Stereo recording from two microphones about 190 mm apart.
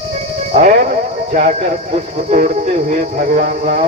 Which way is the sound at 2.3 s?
40° right (ahead or behind).